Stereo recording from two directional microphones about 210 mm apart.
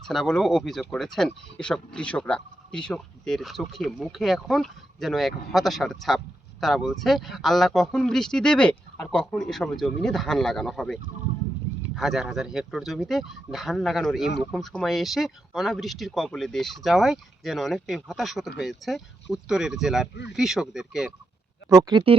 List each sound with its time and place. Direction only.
0.1 s speech: centre (ahead or behind)
21.7 s speech: 15° right (ahead or behind)